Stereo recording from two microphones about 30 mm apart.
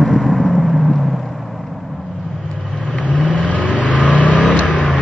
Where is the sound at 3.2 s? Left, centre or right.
Left.